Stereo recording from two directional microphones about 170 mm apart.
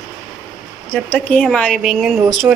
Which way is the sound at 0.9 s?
5° left (ahead or behind).